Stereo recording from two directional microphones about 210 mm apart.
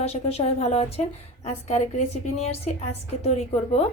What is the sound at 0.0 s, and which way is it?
A woman's voice, 30° left (ahead or behind).